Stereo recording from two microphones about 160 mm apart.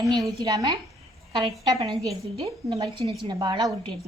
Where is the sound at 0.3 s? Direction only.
25° right (ahead or behind).